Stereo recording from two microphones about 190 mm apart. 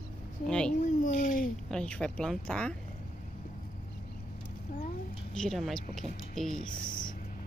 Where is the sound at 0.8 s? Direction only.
45° left (ahead or behind).